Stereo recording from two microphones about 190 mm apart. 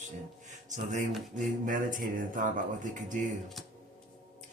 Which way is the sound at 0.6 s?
40° right (ahead or behind).